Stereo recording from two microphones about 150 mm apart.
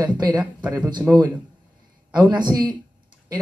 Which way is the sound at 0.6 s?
25° right (ahead or behind).